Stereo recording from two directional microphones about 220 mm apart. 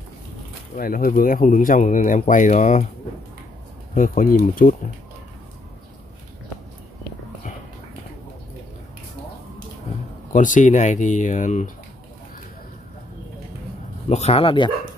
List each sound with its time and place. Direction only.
0.7 s speech: 40° left (ahead or behind)
3.9 s speech: 35° left (ahead or behind)
10.3 s speech: 35° left (ahead or behind)
14.0 s speech: 30° left (ahead or behind)